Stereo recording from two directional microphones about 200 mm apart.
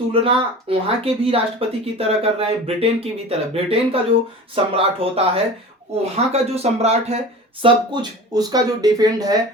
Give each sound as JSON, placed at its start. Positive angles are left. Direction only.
{"t": 0.1, "sound": "speech", "side_deg": -30}
{"t": 7.6, "sound": "speech", "side_deg": -20}